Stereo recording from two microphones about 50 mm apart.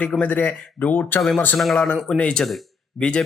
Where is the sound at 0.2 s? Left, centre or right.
Left.